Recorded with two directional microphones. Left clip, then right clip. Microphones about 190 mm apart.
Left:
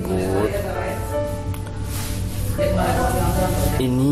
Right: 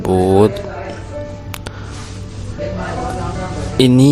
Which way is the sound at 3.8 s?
55° right (ahead or behind).